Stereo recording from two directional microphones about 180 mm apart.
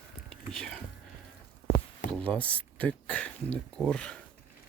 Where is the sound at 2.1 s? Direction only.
5° left (ahead or behind).